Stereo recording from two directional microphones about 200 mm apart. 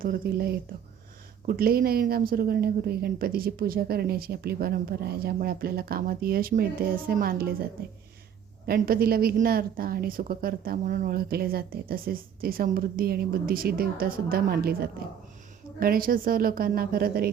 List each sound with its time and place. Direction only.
0.0 s a woman's voice: 50° right (ahead or behind)
8.6 s a woman's voice: 50° right (ahead or behind)